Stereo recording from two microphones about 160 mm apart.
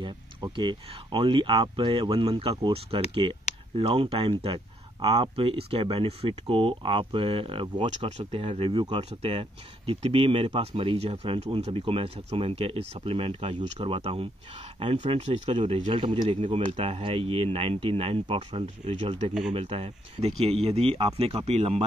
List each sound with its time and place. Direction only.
0.0 s speech: 30° right (ahead or behind)